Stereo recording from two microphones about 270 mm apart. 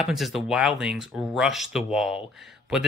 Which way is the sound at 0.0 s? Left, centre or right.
Centre.